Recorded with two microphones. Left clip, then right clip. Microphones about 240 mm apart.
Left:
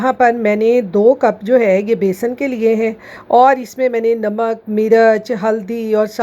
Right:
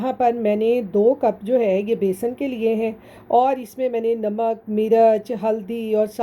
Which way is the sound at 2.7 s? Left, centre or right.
Left.